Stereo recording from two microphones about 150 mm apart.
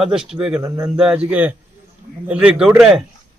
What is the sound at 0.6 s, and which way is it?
Speech, 20° right (ahead or behind).